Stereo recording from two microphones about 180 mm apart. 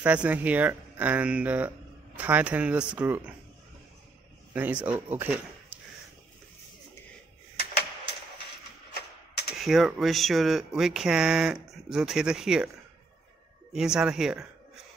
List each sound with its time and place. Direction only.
0.0 s speech: 10° right (ahead or behind)
4.6 s speech: 10° right (ahead or behind)
8.9 s typewriter: 60° left (ahead or behind)
9.6 s speech: centre (ahead or behind)
13.7 s speech: 5° right (ahead or behind)